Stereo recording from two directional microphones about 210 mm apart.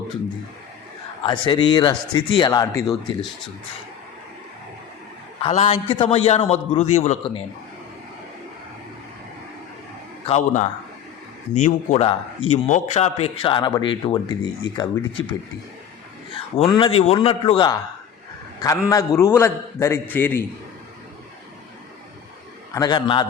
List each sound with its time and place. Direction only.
1.2 s speech: 25° left (ahead or behind)
5.4 s speech: 30° left (ahead or behind)
10.2 s speech: 30° left (ahead or behind)
16.3 s speech: 25° left (ahead or behind)
18.9 s a man's voice: 15° left (ahead or behind)
22.7 s speech: 20° left (ahead or behind)